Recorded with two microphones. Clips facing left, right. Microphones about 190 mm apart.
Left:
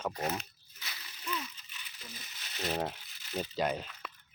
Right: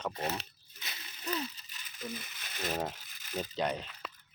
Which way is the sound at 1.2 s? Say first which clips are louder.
Right 3 dB; 40° right (ahead or behind).